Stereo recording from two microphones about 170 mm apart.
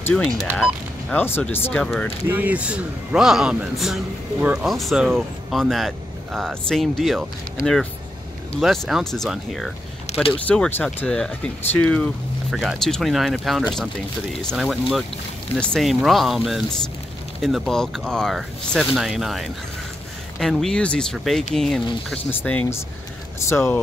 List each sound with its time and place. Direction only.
1.1 s speech: 10° left (ahead or behind)
2.2 s a man's voice: 10° right (ahead or behind)
10.1 s vehicle: 40° left (ahead or behind)
10.4 s a man's voice: 5° left (ahead or behind)